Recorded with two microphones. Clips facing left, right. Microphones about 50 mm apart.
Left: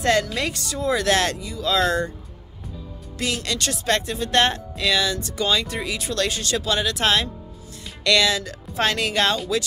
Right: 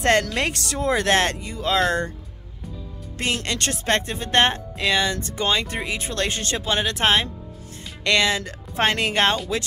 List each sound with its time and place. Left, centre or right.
0.0 s speech: right
3.4 s speech: right